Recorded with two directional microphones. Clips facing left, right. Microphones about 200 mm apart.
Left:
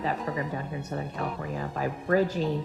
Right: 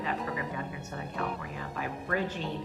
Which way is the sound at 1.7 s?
40° left (ahead or behind).